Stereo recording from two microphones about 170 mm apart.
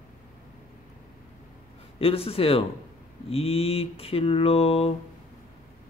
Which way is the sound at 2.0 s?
35° left (ahead or behind).